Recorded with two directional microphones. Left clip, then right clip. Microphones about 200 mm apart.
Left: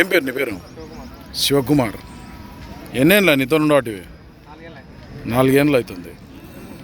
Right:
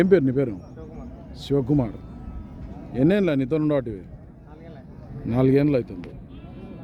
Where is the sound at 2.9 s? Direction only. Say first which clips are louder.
Left 7 dB; centre (ahead or behind).